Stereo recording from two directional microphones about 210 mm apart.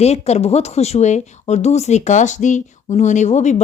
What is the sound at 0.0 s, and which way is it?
Speech, 30° left (ahead or behind).